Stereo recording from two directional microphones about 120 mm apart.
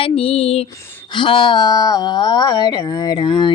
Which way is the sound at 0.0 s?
55° left (ahead or behind).